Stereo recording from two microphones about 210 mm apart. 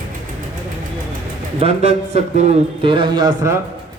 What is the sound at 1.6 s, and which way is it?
Speech, 30° right (ahead or behind).